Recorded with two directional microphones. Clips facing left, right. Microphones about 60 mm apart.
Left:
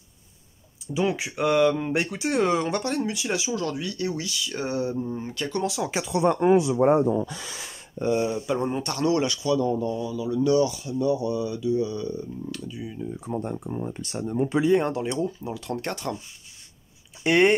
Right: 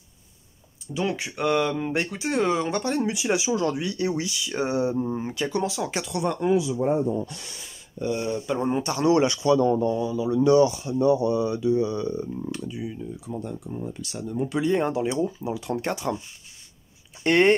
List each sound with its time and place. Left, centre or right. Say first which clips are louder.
0.9 s speech: left 2 dB; centre
3.0 s speech: right 3 dB; centre
5.3 s speech: even; centre
5.7 s speech: left 1 dB; centre
6.0 s speech: left 4 dB; centre
6.5 s speech: left 3 dB; left
8.1 s speech: left 3 dB; centre
8.6 s speech: right 2 dB; centre
9.1 s speech: right 5 dB; right
13.1 s speech: left 3 dB; left
14.6 s speech: left 1 dB; centre
17.2 s speech: right 1 dB; centre